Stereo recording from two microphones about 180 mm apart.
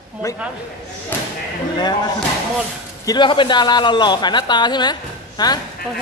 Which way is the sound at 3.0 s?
25° left (ahead or behind).